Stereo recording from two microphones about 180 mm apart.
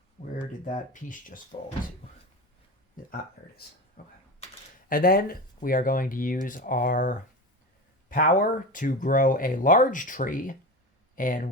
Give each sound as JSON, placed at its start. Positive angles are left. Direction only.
{"t": 0.3, "sound": "speech", "side_deg": 45}
{"t": 3.0, "sound": "speech", "side_deg": 50}